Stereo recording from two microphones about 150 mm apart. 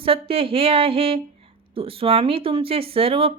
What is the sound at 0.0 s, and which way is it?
Speech, 40° right (ahead or behind).